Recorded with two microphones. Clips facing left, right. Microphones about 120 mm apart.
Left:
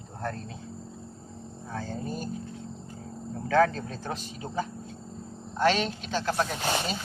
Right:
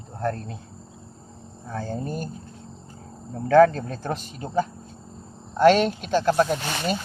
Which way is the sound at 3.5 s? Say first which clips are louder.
Right 8 dB; 50° right (ahead or behind).